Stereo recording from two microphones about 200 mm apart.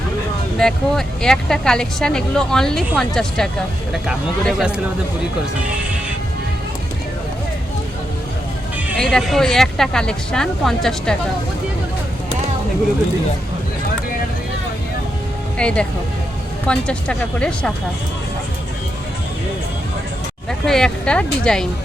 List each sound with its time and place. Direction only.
0.6 s speech: centre (ahead or behind)
9.0 s speech: centre (ahead or behind)
15.5 s speech: 5° left (ahead or behind)
20.7 s speech: 5° left (ahead or behind)